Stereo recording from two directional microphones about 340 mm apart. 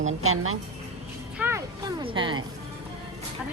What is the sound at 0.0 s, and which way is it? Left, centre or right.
Speech, right.